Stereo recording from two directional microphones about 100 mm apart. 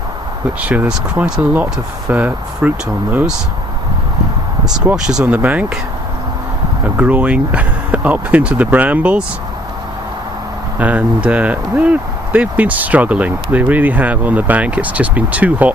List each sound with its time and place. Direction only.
0.6 s speech: 10° right (ahead or behind)
4.9 s speech: 5° right (ahead or behind)
5.2 s speech: 15° right (ahead or behind)
6.8 s speech: 15° right (ahead or behind)
10.8 s speech: 15° right (ahead or behind)